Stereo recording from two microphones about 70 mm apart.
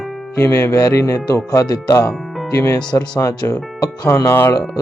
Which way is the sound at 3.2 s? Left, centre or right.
Left.